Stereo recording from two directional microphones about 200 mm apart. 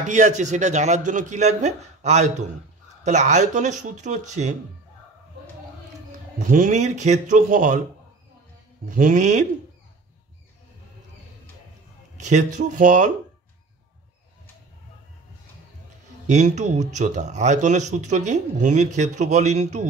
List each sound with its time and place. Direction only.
0.0 s speech: 40° right (ahead or behind)
6.5 s speech: 40° right (ahead or behind)
8.8 s speech: 45° right (ahead or behind)
12.2 s speech: 35° right (ahead or behind)
16.3 s speech: 35° right (ahead or behind)